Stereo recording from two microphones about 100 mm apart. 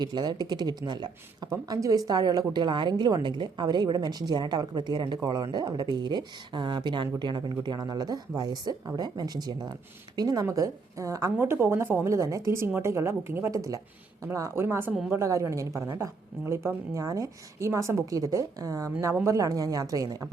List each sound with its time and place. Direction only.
0.0 s a woman's voice: 45° right (ahead or behind)
1.5 s a woman's voice: 35° right (ahead or behind)